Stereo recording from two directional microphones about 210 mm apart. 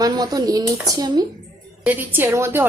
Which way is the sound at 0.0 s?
20° right (ahead or behind).